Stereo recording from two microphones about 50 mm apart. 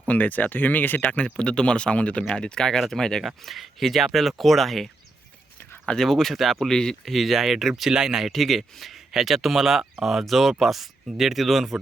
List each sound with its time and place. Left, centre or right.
0.1 s speech: left; by 3.2 s centre
3.2 s speech: centre
6.0 s speech: centre
7.0 s speech: centre
8.3 s speech: centre